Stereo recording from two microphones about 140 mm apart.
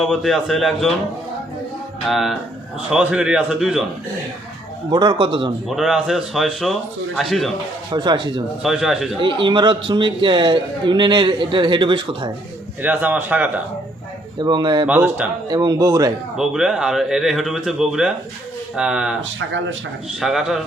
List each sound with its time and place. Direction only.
0.0 s speech: centre (ahead or behind)
2.0 s speech: centre (ahead or behind)
4.9 s a man's voice: 35° right (ahead or behind)
5.6 s speech: 5° right (ahead or behind)
7.9 s a man's voice: 35° right (ahead or behind)
8.6 s speech: centre (ahead or behind)
9.2 s a man's voice: 35° right (ahead or behind)
12.8 s a man's voice: 10° right (ahead or behind)
14.3 s a man's voice: 30° right (ahead or behind)
14.8 s a man's voice: 10° right (ahead or behind)
15.4 s speech: 30° right (ahead or behind)
16.4 s speech: 5° right (ahead or behind)
20.1 s speech: centre (ahead or behind)